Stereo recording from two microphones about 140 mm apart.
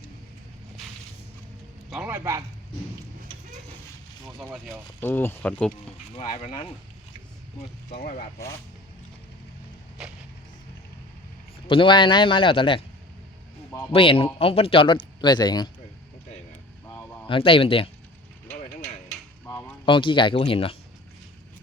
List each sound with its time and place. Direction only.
1.9 s a man's voice: 10° right (ahead or behind)
4.9 s speech: 15° left (ahead or behind)
6.1 s speech: 45° left (ahead or behind)
10.0 s splinter: 5° right (ahead or behind)
11.7 s speech: 35° left (ahead or behind)
13.9 s speech: 40° left (ahead or behind)
17.2 s speech: 40° left (ahead or behind)
19.8 s speech: 35° left (ahead or behind)